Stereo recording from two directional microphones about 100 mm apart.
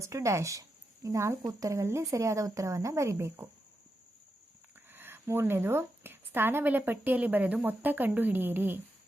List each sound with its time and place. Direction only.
0.0 s a woman's voice: 30° right (ahead or behind)
4.9 s a woman's voice: 20° right (ahead or behind)